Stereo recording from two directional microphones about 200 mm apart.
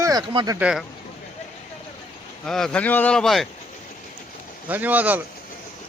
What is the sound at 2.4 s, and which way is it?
Speech, centre (ahead or behind).